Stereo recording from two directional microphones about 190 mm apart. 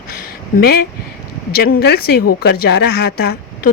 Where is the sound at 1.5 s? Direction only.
55° left (ahead or behind).